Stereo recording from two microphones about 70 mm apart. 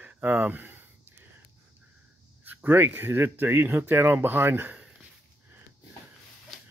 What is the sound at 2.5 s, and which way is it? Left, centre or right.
Speech, right.